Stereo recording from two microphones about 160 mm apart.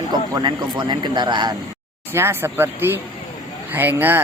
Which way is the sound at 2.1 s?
15° right (ahead or behind).